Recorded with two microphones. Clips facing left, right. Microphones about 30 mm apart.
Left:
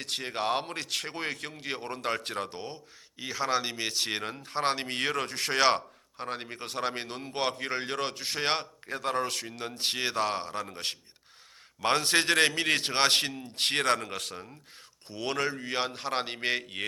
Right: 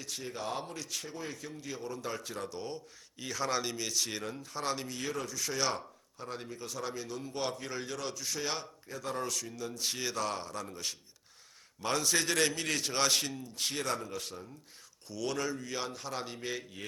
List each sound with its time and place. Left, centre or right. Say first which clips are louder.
0.0 s speech: left 7 dB; left
2.5 s speech: even; left
15.0 s speech: left 4 dB; left